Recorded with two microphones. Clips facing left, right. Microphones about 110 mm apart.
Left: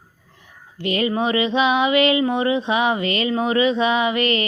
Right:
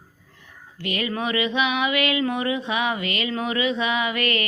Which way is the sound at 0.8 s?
30° left (ahead or behind).